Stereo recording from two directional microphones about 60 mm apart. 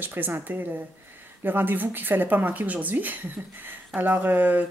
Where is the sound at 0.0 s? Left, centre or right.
Right.